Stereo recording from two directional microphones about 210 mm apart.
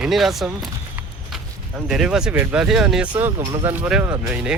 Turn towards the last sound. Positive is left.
turn(degrees=-5)  # may be behind; listen again after turning